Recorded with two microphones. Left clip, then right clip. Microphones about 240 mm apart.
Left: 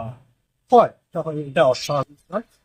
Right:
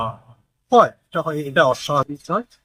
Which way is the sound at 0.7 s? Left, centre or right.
Centre.